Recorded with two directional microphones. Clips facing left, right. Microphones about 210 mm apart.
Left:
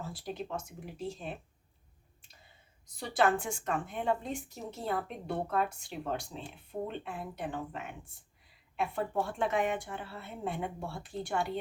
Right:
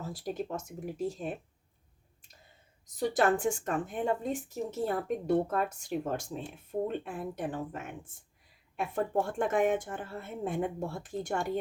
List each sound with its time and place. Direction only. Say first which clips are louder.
0.0 s speech: right 4 dB; 45° right (ahead or behind)
3.0 s speech: right 3 dB; 40° right (ahead or behind)